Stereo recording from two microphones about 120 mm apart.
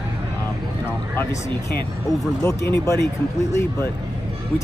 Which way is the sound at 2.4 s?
25° left (ahead or behind).